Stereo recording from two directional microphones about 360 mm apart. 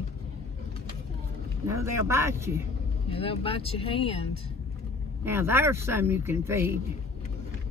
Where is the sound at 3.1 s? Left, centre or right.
Centre.